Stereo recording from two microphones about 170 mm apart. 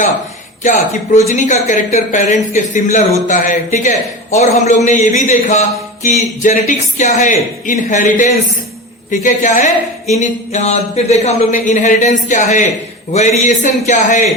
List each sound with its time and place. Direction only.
0.6 s speech: 45° left (ahead or behind)